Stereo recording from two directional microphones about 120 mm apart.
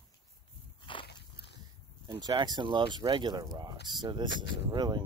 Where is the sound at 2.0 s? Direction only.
35° right (ahead or behind).